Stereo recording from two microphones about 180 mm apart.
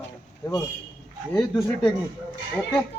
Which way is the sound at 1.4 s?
10° left (ahead or behind).